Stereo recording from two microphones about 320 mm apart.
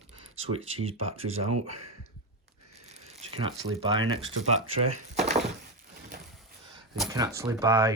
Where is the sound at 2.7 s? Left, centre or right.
Centre.